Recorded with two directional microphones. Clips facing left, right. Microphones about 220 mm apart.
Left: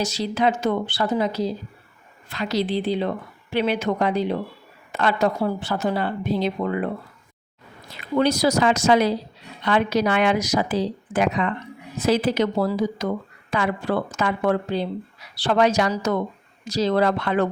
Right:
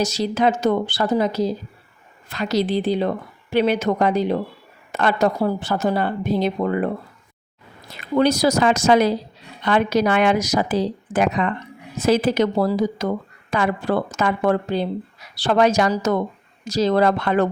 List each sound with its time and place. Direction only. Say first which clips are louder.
0.0 s speech: right 3 dB; 45° right (ahead or behind)
8.2 s speech: right 2 dB; 45° right (ahead or behind)